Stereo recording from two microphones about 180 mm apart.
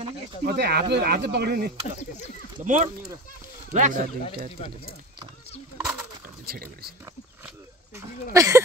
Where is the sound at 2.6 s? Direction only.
45° right (ahead or behind).